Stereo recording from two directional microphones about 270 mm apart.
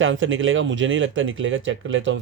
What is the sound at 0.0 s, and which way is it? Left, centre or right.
Speech, right.